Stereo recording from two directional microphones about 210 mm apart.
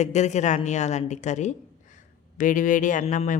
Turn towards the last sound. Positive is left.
turn(degrees=35)  # may be behind; listen again after turning